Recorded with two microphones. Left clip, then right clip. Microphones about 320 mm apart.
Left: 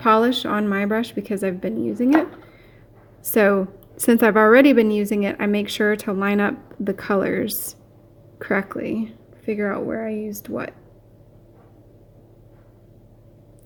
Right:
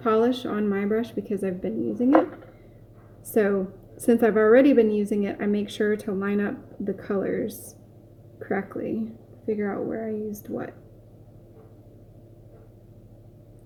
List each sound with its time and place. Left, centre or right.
0.0 s a woman's voice: left
3.2 s a woman's voice: left